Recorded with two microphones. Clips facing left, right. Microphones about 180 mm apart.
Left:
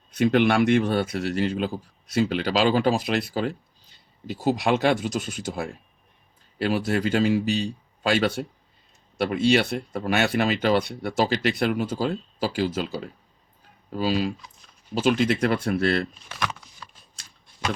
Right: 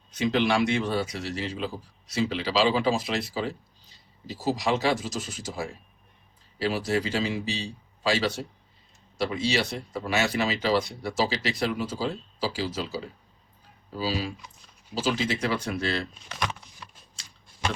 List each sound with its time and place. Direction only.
0.1 s speech: 60° left (ahead or behind)